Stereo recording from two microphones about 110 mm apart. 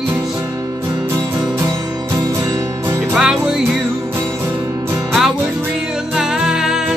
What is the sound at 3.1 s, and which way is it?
Music, 5° right (ahead or behind).